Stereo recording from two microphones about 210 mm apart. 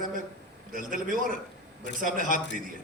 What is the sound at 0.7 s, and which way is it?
A man's voice, 40° right (ahead or behind).